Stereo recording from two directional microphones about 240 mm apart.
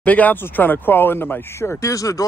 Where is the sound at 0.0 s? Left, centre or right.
Centre.